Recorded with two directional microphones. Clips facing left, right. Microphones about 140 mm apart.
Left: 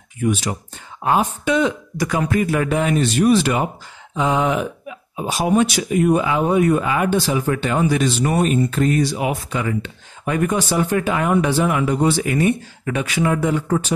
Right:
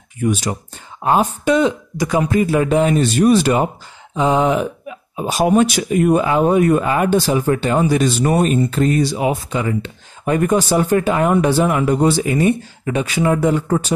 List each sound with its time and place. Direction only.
0.2 s speech: 40° right (ahead or behind)
2.0 s speech: 20° right (ahead or behind)
5.1 s speech: 45° right (ahead or behind)
12.2 s speech: 25° right (ahead or behind)